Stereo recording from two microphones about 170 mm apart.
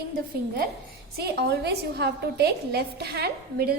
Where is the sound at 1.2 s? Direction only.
70° right (ahead or behind).